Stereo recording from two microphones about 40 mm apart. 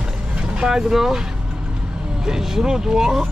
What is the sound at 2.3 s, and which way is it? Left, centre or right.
Speech, centre.